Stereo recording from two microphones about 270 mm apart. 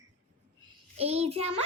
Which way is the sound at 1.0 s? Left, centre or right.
Right.